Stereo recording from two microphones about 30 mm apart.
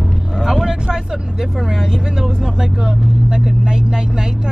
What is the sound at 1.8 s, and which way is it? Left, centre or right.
Vehicle, right.